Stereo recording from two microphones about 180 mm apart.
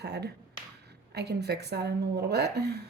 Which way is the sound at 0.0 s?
65° right (ahead or behind).